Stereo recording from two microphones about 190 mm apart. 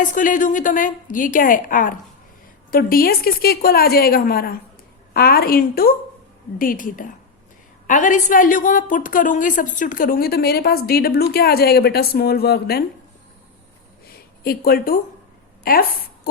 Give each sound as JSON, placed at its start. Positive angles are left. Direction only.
{"t": 0.0, "sound": "a woman's voice", "side_deg": 45}
{"t": 14.4, "sound": "a woman's voice", "side_deg": 55}